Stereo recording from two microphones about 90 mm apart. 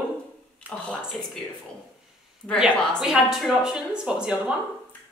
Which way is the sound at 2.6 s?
10° right (ahead or behind).